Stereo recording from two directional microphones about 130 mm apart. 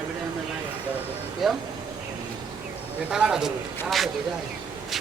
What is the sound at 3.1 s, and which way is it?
Speech, 5° right (ahead or behind).